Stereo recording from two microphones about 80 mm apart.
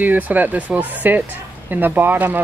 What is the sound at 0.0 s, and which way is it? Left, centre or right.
Speech, right.